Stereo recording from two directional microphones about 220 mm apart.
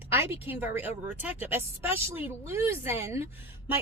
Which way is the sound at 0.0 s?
10° right (ahead or behind).